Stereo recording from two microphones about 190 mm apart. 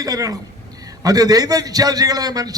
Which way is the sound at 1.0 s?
20° right (ahead or behind).